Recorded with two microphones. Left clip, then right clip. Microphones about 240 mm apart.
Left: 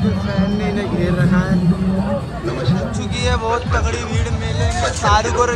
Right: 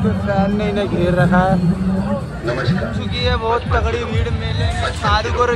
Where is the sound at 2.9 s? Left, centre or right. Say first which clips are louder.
Right 1 dB; centre.